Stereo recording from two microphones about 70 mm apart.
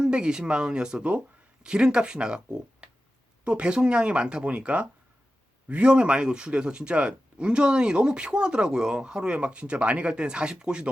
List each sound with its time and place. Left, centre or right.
0.0 s speech: centre